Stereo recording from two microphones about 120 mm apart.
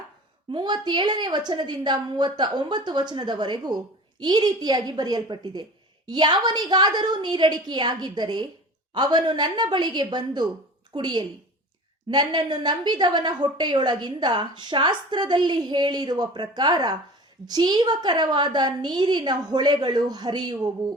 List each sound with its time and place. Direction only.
0.5 s a woman's voice: 40° right (ahead or behind)